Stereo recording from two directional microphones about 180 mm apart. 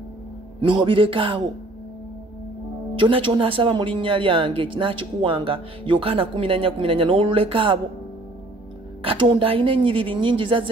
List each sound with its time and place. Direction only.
0.6 s speech: 25° right (ahead or behind)
3.0 s speech: 30° right (ahead or behind)
9.0 s speech: 25° right (ahead or behind)